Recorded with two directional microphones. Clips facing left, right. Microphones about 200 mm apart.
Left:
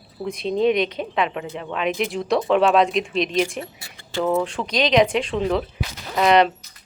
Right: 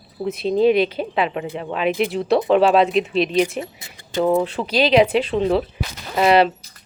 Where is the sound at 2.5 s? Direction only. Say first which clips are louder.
Right 2 dB; 30° right (ahead or behind).